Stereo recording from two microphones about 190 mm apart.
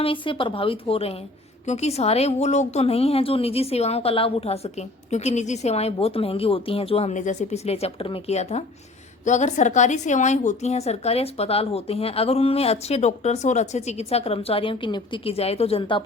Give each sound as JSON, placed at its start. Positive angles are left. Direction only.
{"t": 0.0, "sound": "a woman's voice", "side_deg": 25}